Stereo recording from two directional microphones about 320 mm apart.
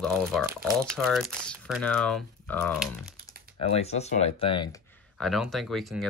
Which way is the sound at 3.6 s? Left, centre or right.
Centre.